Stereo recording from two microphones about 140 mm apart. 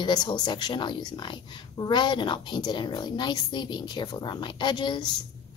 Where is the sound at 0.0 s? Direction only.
30° left (ahead or behind).